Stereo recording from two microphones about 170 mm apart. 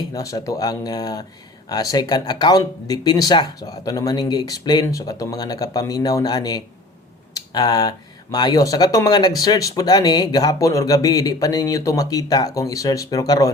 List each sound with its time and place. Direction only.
0.1 s speech: 20° left (ahead or behind)